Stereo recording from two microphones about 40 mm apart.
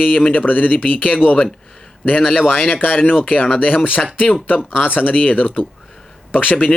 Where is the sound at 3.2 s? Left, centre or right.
Left.